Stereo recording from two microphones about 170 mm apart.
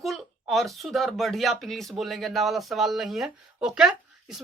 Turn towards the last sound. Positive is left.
turn(degrees=-5)  # may be behind; listen again after turning